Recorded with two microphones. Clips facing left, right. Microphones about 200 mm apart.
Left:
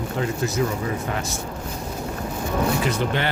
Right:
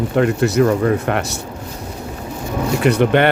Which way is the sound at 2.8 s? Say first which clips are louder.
Right 10 dB; 65° right (ahead or behind).